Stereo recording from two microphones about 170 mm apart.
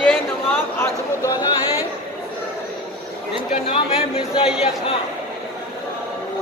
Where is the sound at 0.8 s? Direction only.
20° left (ahead or behind).